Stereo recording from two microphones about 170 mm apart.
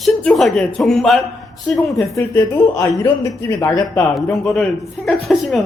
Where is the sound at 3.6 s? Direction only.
20° left (ahead or behind).